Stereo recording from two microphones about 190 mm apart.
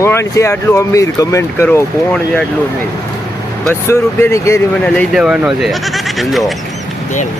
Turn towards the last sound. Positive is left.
turn(degrees=0)  # may be behind; listen again after turning